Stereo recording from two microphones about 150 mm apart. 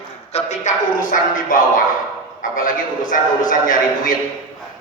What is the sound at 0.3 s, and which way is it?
A man's voice, 50° left (ahead or behind).